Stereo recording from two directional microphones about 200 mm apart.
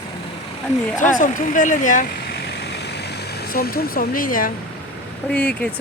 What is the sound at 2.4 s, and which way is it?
Vehicle, 55° left (ahead or behind).